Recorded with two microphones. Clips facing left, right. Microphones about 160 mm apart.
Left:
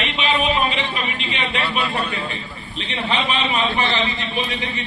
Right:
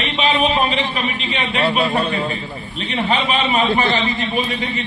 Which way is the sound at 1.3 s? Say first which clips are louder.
Right 6 dB; 45° right (ahead or behind).